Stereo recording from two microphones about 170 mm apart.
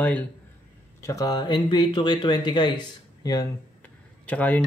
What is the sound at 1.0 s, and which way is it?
Speech, 20° left (ahead or behind).